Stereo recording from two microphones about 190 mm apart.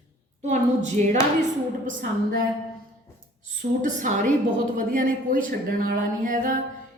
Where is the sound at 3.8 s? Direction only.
40° right (ahead or behind).